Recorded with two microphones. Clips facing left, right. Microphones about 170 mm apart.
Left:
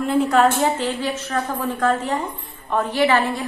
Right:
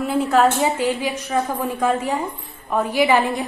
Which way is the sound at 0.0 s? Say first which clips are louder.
Even; 5° right (ahead or behind).